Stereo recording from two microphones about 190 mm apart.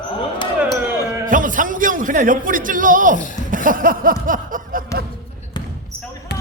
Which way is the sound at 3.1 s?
45° left (ahead or behind).